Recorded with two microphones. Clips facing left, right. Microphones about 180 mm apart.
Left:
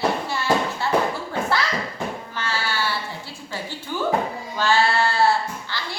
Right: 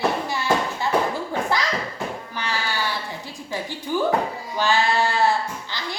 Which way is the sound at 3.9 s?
10° right (ahead or behind).